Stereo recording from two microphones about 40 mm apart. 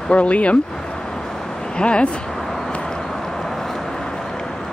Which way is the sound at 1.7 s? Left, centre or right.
Left.